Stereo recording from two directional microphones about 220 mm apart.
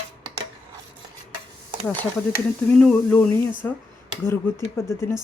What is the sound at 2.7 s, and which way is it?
Speech, 5° left (ahead or behind).